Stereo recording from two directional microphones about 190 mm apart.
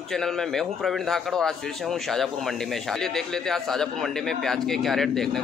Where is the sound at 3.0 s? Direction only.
Centre (ahead or behind).